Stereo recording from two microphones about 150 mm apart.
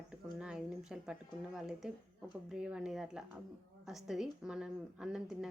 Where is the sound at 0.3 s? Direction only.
5° right (ahead or behind).